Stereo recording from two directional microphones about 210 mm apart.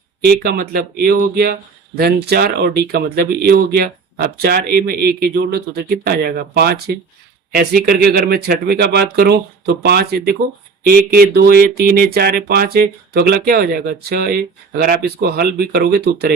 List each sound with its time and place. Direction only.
0.3 s speech: 50° right (ahead or behind)